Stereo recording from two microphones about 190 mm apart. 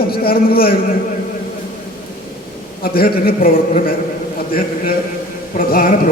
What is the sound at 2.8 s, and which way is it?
A man's voice, 50° left (ahead or behind).